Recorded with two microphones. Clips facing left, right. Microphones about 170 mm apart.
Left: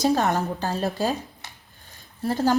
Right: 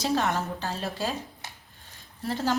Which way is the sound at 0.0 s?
40° left (ahead or behind).